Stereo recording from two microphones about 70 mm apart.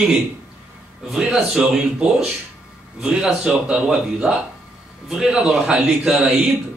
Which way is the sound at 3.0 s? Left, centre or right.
Centre.